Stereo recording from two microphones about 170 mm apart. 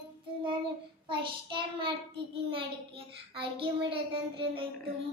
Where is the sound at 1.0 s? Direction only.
30° right (ahead or behind).